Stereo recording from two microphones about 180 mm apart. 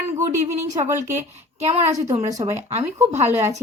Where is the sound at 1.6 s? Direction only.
35° right (ahead or behind).